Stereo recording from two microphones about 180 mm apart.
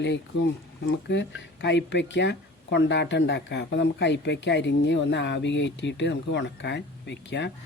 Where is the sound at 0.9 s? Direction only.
75° left (ahead or behind).